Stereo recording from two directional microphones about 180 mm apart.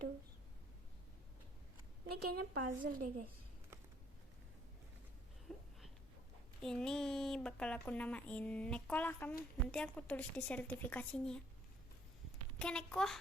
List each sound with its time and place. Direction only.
2.0 s a woman's voice: 60° right (ahead or behind)
5.5 s a sound: centre (ahead or behind)
6.6 s speech: 5° left (ahead or behind)
12.5 s a child's voice: 5° left (ahead or behind)